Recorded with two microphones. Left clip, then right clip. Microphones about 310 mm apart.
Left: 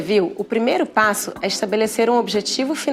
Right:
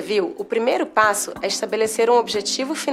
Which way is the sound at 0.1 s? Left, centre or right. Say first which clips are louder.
Left 3 dB; left.